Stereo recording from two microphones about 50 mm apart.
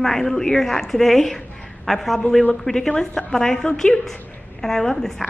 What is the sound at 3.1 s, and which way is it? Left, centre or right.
A woman's voice, left.